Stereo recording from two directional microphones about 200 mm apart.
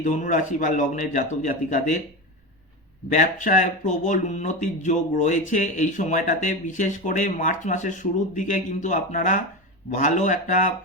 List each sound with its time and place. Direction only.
0.0 s speech: 40° left (ahead or behind)
3.1 s speech: 40° left (ahead or behind)